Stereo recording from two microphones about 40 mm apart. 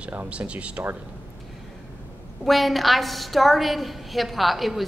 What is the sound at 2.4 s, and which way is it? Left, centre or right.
A woman's voice, centre.